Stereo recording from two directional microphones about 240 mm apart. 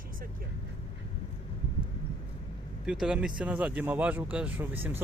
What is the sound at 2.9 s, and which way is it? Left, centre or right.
Speech, centre.